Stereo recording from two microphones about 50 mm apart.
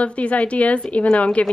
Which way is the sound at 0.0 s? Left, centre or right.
Left.